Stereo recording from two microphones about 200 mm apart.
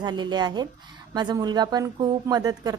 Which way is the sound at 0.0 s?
20° right (ahead or behind).